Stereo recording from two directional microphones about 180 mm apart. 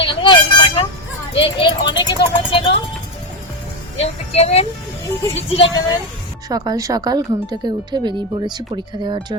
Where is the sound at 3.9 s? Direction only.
35° left (ahead or behind).